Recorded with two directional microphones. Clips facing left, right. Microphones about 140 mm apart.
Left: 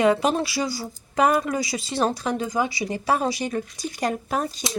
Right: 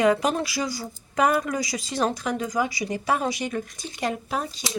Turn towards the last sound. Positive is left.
turn(degrees=45)  # may be behind; listen again after turning